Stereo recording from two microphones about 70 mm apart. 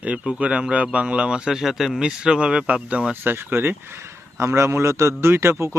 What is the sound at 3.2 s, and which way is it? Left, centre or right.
A man's voice, right.